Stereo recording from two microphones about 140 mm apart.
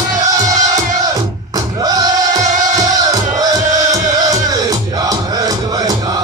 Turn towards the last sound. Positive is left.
turn(degrees=-25)  # may be behind; listen again after turning